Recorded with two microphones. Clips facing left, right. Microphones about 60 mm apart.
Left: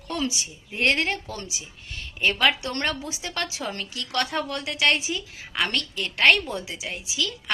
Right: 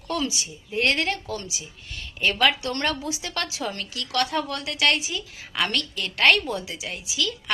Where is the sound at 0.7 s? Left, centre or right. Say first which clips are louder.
Even; left.